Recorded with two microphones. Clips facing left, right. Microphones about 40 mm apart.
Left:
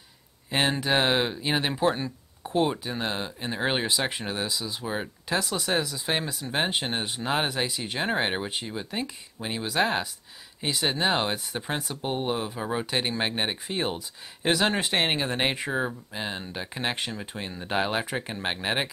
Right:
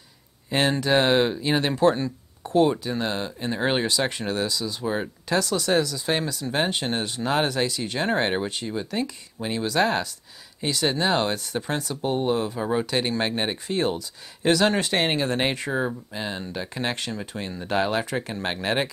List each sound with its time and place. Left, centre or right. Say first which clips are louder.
0.5 s speech: right 3 dB; centre
4.8 s speech: right 6 dB; centre
5.4 s speech: right 6 dB; centre
6.4 s speech: right 2 dB; centre